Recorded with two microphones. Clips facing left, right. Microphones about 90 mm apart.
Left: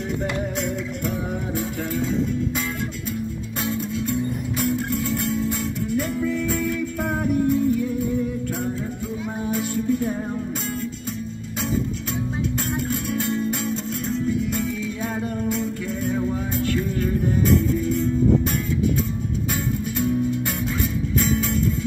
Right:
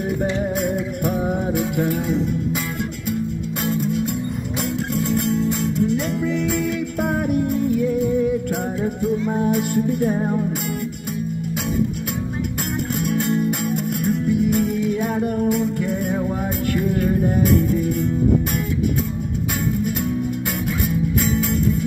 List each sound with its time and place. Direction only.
0.2 s music: 50° right (ahead or behind)
3.7 s music: 60° right (ahead or behind)
10.1 s music: 40° right (ahead or behind)
13.0 s guitar: 60° right (ahead or behind)
13.5 s music: 60° right (ahead or behind)
21.3 s music: 60° right (ahead or behind)